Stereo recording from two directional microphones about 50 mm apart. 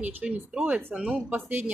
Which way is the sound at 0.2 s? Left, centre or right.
Centre.